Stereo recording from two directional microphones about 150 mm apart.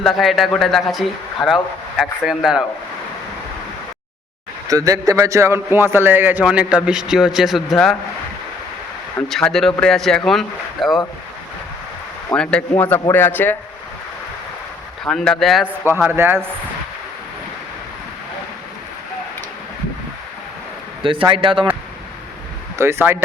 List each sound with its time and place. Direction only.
0.0 s a man's voice: centre (ahead or behind)
4.7 s a man's voice: 25° right (ahead or behind); by 7.9 s centre (ahead or behind)
9.3 s a man's voice: centre (ahead or behind)
12.4 s speech: 5° left (ahead or behind)
15.0 s a man's voice: 5° left (ahead or behind)
15.6 s a man's voice: 10° right (ahead or behind)
21.0 s a man's voice: 35° right (ahead or behind)
22.8 s a man's voice: 15° right (ahead or behind)